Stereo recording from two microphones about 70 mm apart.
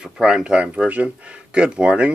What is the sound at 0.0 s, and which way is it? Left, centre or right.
Speech, centre.